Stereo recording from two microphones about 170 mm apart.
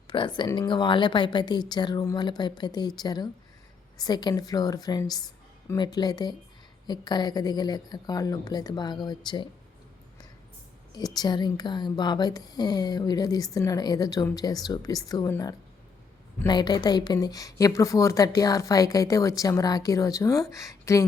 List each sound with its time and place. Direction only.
0.1 s speech: 30° left (ahead or behind)
10.9 s speech: 25° left (ahead or behind)